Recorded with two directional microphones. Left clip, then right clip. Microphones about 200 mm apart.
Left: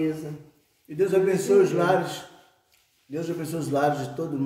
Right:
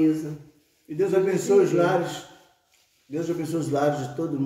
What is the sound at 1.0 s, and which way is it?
A man's voice, 15° left (ahead or behind).